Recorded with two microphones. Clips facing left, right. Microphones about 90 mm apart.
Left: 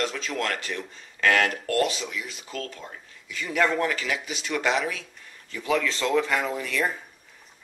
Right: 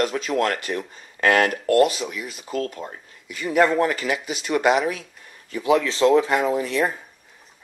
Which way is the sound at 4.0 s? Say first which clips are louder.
Right 5 dB; 45° right (ahead or behind).